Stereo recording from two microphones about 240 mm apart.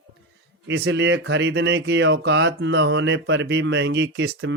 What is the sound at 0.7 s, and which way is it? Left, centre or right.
Speech, right.